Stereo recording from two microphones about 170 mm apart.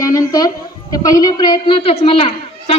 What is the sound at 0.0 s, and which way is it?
A woman's voice, 20° left (ahead or behind).